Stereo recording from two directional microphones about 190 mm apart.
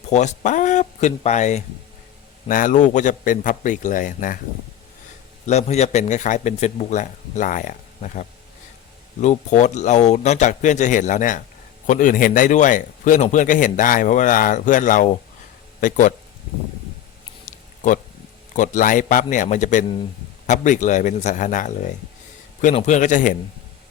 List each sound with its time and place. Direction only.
0.1 s a man's voice: 40° left (ahead or behind)
5.5 s a man's voice: 35° left (ahead or behind)
17.4 s a sound: 40° left (ahead or behind)
18.5 s speech: 40° left (ahead or behind)